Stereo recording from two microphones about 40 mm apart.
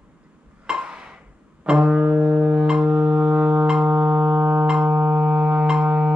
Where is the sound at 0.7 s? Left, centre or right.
Right.